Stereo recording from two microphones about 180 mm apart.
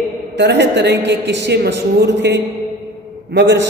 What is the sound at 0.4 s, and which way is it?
A man's voice, 70° right (ahead or behind).